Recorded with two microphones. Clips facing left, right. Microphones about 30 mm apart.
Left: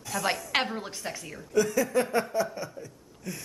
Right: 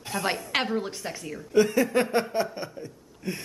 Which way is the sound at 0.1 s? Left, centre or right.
Right.